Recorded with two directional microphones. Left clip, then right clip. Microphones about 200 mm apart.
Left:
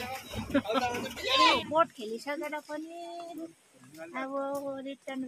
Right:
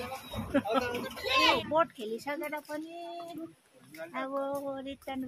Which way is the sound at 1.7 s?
5° right (ahead or behind).